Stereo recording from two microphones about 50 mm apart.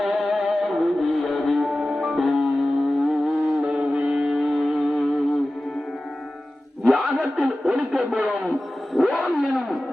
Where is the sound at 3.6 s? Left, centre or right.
Right.